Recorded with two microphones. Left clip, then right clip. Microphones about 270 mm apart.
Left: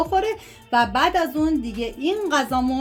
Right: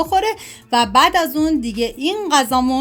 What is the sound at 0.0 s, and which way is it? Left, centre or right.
Speech, right.